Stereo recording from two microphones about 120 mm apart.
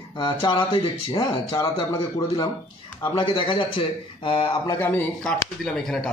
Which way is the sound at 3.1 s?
45° left (ahead or behind).